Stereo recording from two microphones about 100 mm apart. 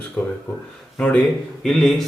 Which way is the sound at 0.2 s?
15° left (ahead or behind).